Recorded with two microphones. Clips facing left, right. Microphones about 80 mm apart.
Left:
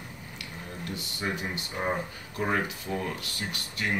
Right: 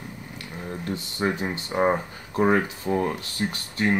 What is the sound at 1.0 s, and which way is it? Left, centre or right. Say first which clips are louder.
Speech: right 6 dB; right.